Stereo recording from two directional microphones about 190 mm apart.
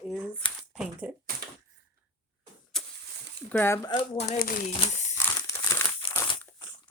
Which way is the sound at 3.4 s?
10° left (ahead or behind).